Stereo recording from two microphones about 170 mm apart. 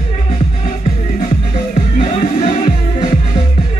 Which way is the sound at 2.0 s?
40° left (ahead or behind).